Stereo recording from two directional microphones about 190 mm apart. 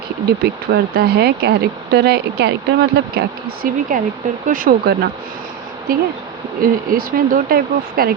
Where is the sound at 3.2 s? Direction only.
50° right (ahead or behind).